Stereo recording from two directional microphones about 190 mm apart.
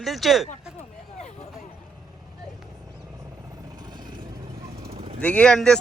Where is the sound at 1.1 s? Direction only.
35° left (ahead or behind).